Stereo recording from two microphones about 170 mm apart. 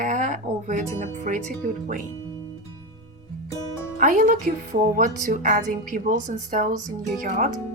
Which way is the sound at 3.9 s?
50° right (ahead or behind).